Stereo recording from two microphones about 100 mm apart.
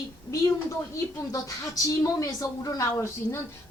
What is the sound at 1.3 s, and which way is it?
A woman's voice, 35° left (ahead or behind).